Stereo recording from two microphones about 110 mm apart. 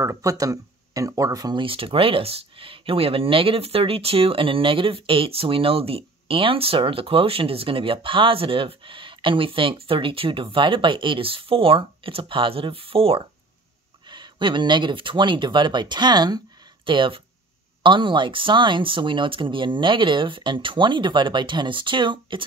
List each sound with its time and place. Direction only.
0.0 s speech: 30° right (ahead or behind)
1.6 s speech: 55° right (ahead or behind)
14.0 s speech: 45° right (ahead or behind)